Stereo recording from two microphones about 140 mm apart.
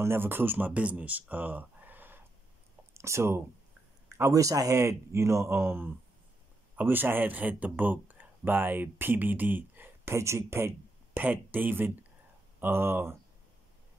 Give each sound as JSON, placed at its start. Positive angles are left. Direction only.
{"t": 0.0, "sound": "speech", "side_deg": -15}